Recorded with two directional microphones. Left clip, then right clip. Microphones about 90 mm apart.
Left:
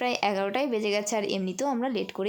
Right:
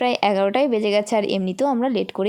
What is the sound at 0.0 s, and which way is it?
A woman's voice, 60° right (ahead or behind).